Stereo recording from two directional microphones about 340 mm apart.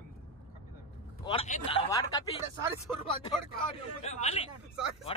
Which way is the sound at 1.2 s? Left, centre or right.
Centre.